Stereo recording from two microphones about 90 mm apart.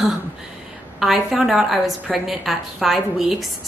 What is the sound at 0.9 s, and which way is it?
A woman's voice, 5° right (ahead or behind).